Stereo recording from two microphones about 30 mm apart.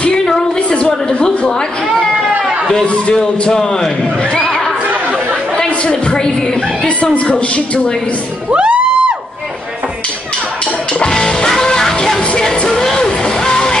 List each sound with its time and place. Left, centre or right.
0.6 s a sound: left
3.2 s a woman's voice: centre
4.2 s music: left
5.6 s a woman's voice: left
7.3 s a woman's voice: left
8.5 s music: right
10.9 s music: left